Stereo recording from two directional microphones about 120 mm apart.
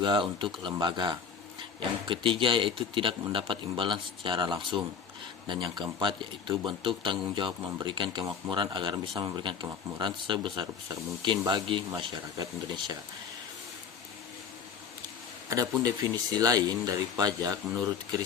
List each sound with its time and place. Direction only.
0.0 s speech: 40° right (ahead or behind)
15.4 s speech: 30° right (ahead or behind)